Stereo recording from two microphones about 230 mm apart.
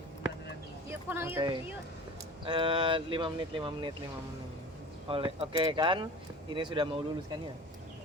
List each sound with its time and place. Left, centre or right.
0.9 s speech: centre
5.0 s speech: right